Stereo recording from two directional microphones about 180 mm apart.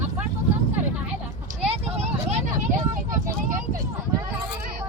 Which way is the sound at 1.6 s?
35° right (ahead or behind).